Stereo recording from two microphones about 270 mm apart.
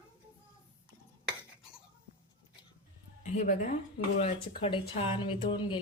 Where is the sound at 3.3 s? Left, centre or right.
Left.